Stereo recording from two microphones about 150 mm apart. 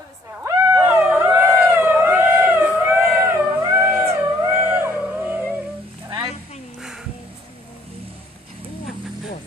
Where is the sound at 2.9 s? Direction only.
15° right (ahead or behind).